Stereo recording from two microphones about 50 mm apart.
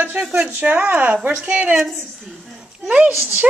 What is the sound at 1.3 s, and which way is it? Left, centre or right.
Speech, right.